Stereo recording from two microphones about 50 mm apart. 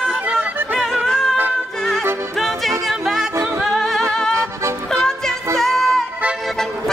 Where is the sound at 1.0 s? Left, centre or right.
Centre.